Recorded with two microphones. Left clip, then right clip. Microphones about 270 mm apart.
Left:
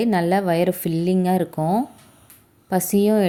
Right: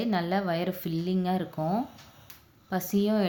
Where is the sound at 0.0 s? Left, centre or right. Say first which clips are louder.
Left 9 dB; left.